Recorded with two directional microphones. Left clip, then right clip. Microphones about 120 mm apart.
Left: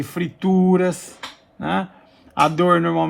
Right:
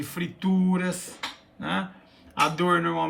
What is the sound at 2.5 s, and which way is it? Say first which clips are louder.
Speech: left 7 dB; 55° left (ahead or behind).